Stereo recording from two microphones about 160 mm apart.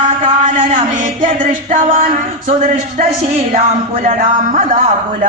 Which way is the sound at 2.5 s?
55° right (ahead or behind).